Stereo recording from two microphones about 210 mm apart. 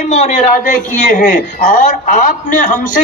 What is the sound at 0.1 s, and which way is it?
A woman's voice, 35° left (ahead or behind).